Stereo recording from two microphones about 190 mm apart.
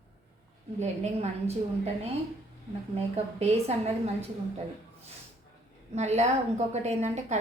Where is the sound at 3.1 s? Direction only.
35° right (ahead or behind).